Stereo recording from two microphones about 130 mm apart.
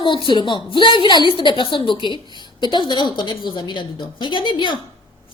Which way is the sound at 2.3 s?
35° left (ahead or behind).